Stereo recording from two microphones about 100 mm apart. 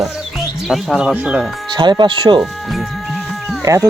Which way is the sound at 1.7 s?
50° right (ahead or behind).